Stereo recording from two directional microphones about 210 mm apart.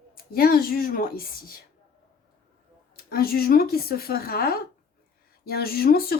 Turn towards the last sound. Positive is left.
turn(degrees=45)  # may be behind; listen again after turning